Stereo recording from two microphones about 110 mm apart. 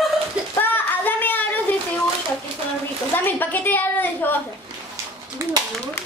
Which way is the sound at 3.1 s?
15° left (ahead or behind).